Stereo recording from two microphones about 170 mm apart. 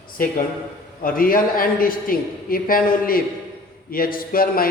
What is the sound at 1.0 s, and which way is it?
A man's voice, 55° left (ahead or behind).